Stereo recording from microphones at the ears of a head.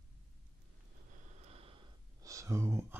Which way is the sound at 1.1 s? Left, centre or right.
Right.